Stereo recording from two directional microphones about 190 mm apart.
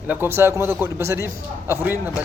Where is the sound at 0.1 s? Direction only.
10° right (ahead or behind).